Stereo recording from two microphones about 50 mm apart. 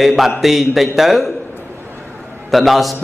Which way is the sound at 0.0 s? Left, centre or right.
Centre.